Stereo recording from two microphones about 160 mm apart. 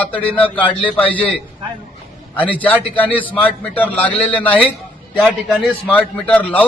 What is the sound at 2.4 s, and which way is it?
A man's voice, 10° left (ahead or behind).